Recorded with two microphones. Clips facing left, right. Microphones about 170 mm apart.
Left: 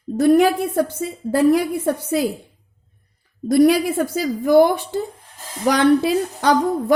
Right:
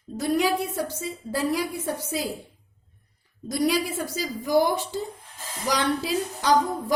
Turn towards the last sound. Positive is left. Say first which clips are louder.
# left 5 dB
turn(degrees=60)  # may be behind; listen again after turning